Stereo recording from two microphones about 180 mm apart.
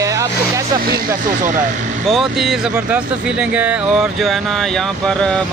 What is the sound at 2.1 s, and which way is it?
Speech, centre (ahead or behind).